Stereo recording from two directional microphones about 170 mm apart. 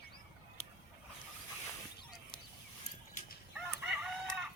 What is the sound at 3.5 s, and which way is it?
Chicken, 5° right (ahead or behind).